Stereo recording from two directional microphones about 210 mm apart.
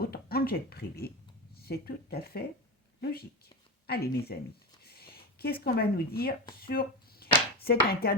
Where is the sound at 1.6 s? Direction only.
45° left (ahead or behind).